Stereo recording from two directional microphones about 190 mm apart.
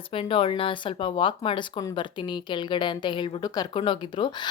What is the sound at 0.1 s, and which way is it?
Speech, 30° left (ahead or behind).